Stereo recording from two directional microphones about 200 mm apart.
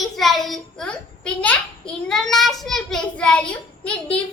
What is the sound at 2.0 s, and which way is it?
Child singing, centre (ahead or behind).